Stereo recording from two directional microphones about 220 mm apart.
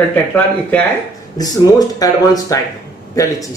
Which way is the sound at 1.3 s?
15° left (ahead or behind).